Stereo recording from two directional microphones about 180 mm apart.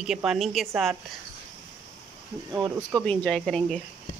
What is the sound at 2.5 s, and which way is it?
Speech, 25° right (ahead or behind).